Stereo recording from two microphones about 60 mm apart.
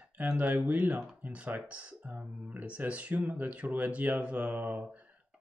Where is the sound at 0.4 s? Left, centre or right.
Right.